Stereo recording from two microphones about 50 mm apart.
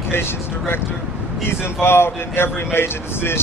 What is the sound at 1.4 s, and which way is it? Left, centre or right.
Speech, left.